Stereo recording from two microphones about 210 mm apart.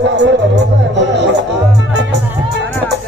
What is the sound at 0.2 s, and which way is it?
Music, 55° right (ahead or behind).